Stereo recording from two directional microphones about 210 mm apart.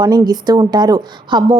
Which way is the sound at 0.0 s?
20° right (ahead or behind).